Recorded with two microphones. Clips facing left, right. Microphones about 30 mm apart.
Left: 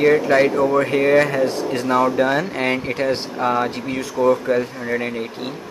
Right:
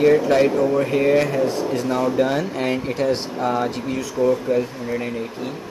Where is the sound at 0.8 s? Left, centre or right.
Left.